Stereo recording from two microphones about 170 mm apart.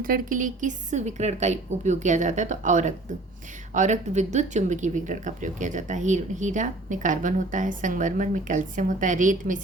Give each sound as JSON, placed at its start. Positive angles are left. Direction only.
{"t": 0.0, "sound": "speech", "side_deg": -55}